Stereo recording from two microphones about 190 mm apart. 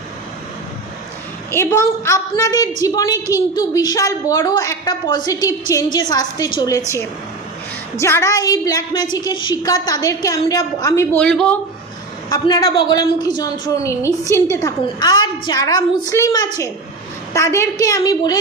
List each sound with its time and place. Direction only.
1.5 s a woman's voice: 15° left (ahead or behind)
12.3 s a woman's voice: 20° left (ahead or behind)